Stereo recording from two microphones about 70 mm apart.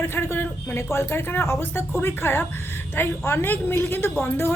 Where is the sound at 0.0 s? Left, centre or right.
Left.